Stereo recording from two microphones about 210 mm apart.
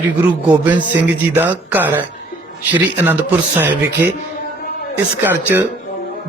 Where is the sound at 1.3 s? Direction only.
10° right (ahead or behind).